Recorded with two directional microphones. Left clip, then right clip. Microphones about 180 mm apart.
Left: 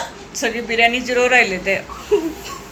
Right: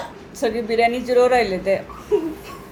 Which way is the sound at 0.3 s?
25° right (ahead or behind).